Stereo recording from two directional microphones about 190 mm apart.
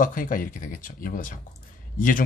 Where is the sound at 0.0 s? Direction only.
45° left (ahead or behind).